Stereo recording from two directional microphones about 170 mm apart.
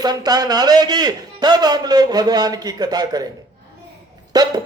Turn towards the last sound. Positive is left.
turn(degrees=-25)  # may be behind; listen again after turning